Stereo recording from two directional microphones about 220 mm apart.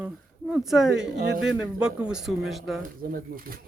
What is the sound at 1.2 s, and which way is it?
Speech, 50° right (ahead or behind).